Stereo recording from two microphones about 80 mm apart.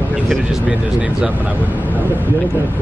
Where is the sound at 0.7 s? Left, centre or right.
Centre.